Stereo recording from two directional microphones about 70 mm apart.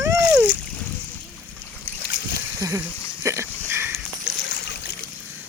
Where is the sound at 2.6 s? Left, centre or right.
Right.